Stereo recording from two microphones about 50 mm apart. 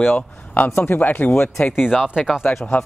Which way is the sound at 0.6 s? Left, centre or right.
Left.